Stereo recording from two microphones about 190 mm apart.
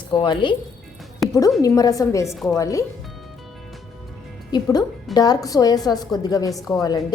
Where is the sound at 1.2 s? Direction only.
Centre (ahead or behind).